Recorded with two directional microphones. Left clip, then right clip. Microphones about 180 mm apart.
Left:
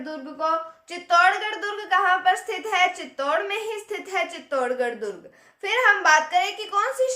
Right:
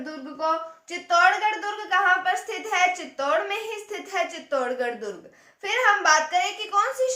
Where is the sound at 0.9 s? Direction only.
40° left (ahead or behind).